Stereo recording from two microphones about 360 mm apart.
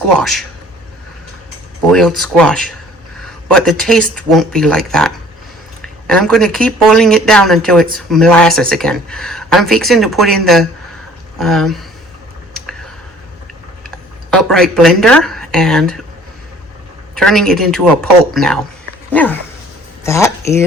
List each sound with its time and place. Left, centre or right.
0.2 s speech: centre
1.9 s speech: centre
14.3 s speech: centre
17.2 s speech: centre